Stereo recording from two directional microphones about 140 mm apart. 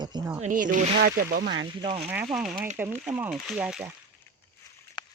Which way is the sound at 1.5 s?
40° right (ahead or behind).